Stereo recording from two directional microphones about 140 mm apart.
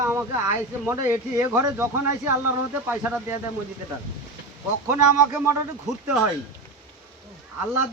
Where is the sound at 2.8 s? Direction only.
10° right (ahead or behind).